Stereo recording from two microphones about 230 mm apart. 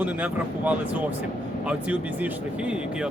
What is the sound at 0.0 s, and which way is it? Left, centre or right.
Speech, centre.